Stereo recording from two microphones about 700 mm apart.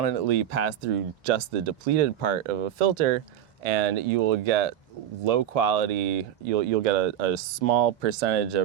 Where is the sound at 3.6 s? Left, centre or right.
Right.